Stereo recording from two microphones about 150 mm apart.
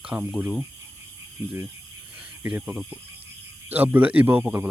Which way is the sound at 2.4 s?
15° right (ahead or behind).